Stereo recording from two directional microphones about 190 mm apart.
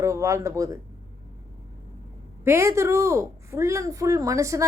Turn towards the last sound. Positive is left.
turn(degrees=-15)  # may be behind; listen again after turning